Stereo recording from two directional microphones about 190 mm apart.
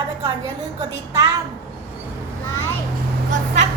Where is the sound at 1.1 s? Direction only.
20° right (ahead or behind).